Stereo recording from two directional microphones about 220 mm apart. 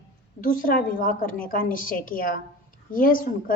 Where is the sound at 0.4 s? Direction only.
40° left (ahead or behind).